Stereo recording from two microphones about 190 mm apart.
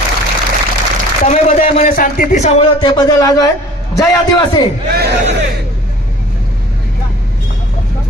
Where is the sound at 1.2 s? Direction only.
40° left (ahead or behind).